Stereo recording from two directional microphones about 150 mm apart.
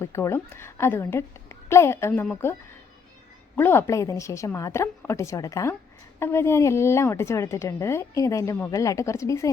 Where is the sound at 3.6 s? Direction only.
15° left (ahead or behind).